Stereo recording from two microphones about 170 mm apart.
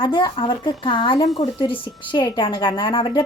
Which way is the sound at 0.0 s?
30° left (ahead or behind).